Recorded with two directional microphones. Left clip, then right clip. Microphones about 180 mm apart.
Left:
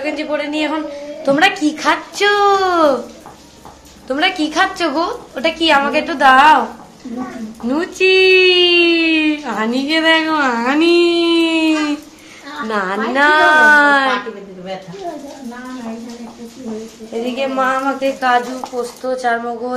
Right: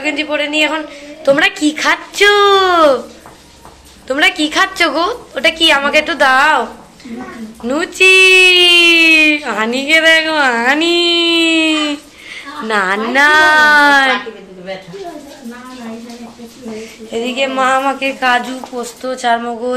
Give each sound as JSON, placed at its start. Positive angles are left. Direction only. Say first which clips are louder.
{"t": 0.0, "sound": "speech", "louder": "right 3 dB", "side_deg": -5}
{"t": 4.1, "sound": "speech", "louder": "right 4 dB", "side_deg": 0}
{"t": 7.6, "sound": "a woman's voice", "louder": "right 5 dB", "side_deg": 0}
{"t": 17.1, "sound": "a woman's voice", "louder": "right 3 dB", "side_deg": -15}